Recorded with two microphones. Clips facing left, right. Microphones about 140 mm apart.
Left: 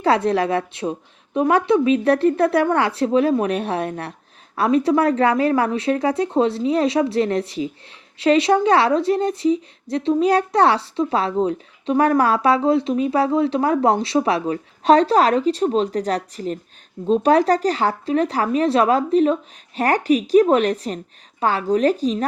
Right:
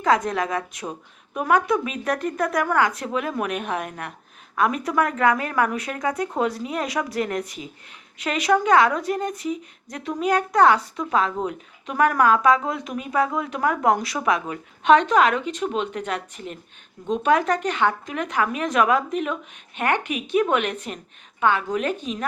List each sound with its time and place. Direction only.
0.0 s a woman's voice: 30° left (ahead or behind)